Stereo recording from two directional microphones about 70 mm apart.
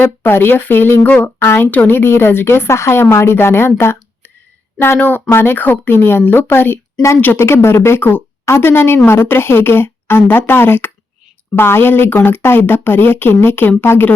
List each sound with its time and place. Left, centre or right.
0.0 s speech: left